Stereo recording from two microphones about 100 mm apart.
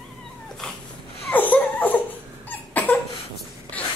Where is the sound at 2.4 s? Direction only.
20° left (ahead or behind).